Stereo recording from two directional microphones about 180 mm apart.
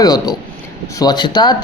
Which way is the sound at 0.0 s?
20° left (ahead or behind).